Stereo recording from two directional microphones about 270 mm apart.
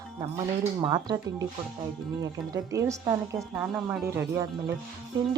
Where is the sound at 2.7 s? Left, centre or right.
Centre.